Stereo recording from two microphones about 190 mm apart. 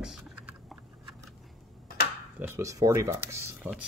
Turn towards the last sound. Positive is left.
turn(degrees=-10)  # may be behind; listen again after turning